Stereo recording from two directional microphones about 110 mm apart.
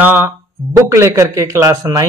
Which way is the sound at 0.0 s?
15° right (ahead or behind).